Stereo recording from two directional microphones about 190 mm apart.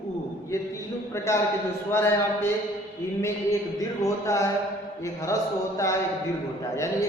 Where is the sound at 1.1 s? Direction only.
15° left (ahead or behind).